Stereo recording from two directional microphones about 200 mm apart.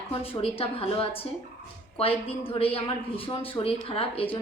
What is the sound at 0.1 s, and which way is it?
Speech, 30° left (ahead or behind).